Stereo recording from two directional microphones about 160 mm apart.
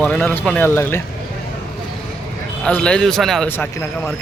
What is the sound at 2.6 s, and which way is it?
A man's voice, 5° left (ahead or behind).